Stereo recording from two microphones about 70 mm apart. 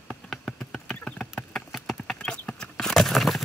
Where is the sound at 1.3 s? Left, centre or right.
Centre.